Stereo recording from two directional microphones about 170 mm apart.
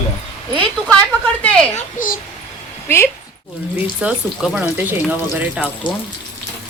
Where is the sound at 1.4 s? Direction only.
5° left (ahead or behind).